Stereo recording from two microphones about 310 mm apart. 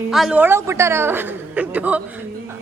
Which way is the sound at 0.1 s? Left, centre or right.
Centre.